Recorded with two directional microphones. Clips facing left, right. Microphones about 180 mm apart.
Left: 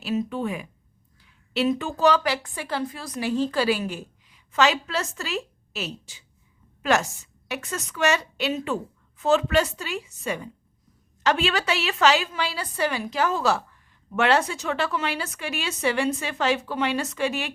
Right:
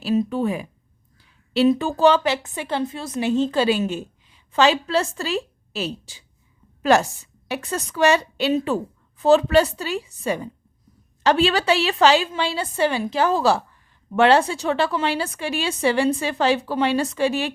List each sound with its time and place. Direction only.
0.0 s a woman's voice: 35° right (ahead or behind)